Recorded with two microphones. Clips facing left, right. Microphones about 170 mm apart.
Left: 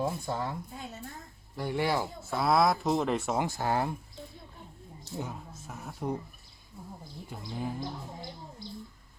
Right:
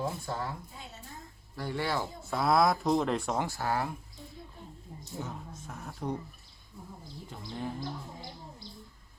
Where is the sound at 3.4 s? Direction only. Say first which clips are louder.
Left 2 dB; 20° left (ahead or behind).